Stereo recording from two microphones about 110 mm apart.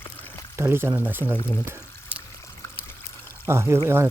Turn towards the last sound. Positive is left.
turn(degrees=-25)  # may be behind; listen again after turning